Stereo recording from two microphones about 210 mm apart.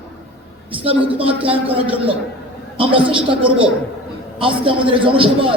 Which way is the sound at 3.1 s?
25° right (ahead or behind).